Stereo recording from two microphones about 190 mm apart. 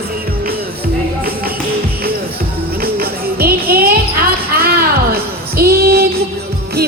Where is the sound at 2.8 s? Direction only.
50° right (ahead or behind).